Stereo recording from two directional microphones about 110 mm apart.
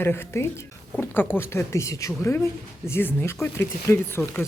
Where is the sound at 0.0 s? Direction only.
20° left (ahead or behind).